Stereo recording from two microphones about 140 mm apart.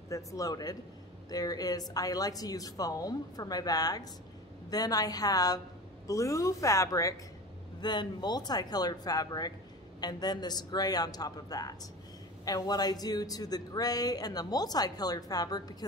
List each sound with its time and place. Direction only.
0.1 s speech: 25° left (ahead or behind)